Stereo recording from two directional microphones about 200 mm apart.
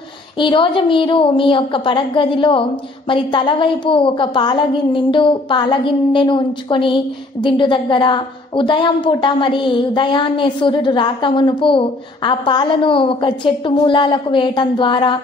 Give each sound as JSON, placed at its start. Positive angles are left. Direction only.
{"t": 0.4, "sound": "a woman's voice", "side_deg": 25}